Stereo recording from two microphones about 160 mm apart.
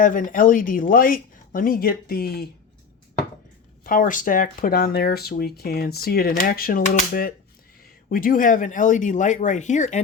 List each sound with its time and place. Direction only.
0.0 s speech: 60° left (ahead or behind)
3.8 s speech: 60° left (ahead or behind)